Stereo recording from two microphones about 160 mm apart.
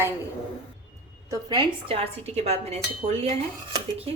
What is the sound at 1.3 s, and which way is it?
A woman's voice, 25° right (ahead or behind).